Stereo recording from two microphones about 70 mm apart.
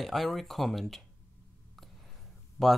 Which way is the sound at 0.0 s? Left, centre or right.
Centre.